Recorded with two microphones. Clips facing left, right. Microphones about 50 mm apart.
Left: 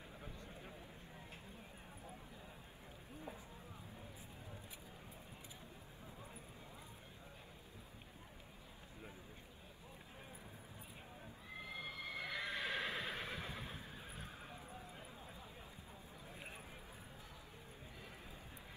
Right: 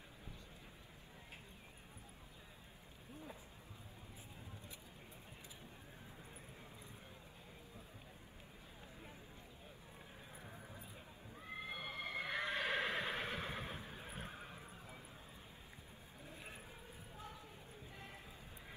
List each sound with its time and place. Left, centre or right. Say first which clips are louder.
11.6 s horse: right 1 dB; right